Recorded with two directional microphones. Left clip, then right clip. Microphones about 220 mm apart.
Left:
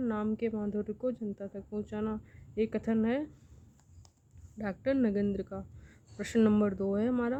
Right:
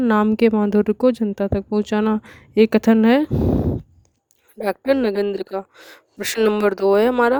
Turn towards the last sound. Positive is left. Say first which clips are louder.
# right 17 dB
turn(degrees=-50)  # may be behind; listen again after turning